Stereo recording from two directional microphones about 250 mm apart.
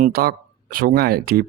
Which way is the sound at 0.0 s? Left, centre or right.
Right.